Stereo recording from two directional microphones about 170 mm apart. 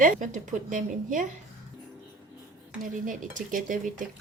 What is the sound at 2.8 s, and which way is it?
Speech, 50° right (ahead or behind).